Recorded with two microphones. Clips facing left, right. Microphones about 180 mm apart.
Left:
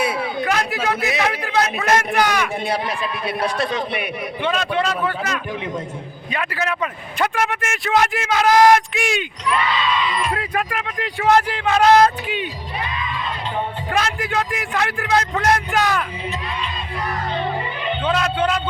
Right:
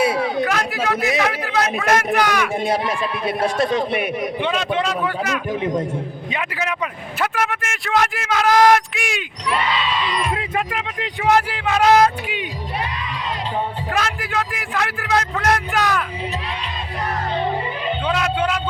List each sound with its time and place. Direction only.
0.0 s a sound: 40° right (ahead or behind)
0.4 s a sound: centre (ahead or behind)
2.1 s speech: centre (ahead or behind)
2.6 s a man's voice: 45° right (ahead or behind)
4.4 s speech: 20° right (ahead or behind)
7.2 s speech: centre (ahead or behind)
10.3 s speech: 20° right (ahead or behind)
13.9 s speech: centre (ahead or behind)
18.0 s a man's voice: 10° right (ahead or behind)